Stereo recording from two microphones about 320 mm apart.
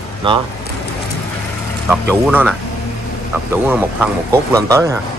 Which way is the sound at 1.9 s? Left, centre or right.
Centre.